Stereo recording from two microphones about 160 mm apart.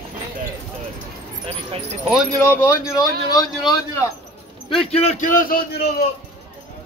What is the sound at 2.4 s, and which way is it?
Speech, 20° left (ahead or behind).